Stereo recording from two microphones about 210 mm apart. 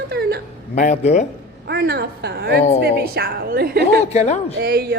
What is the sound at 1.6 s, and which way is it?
A woman's voice, 50° right (ahead or behind).